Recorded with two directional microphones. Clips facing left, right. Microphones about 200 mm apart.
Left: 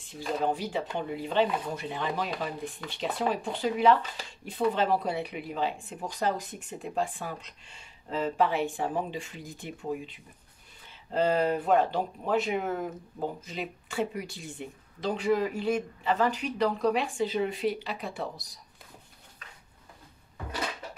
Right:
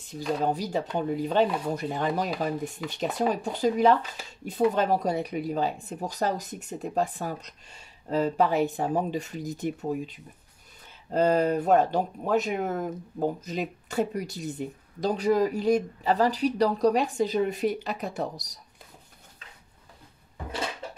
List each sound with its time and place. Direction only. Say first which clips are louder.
0.5 s speech: right 3 dB; 40° right (ahead or behind)